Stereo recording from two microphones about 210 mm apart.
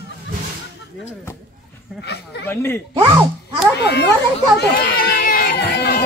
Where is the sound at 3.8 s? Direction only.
55° left (ahead or behind).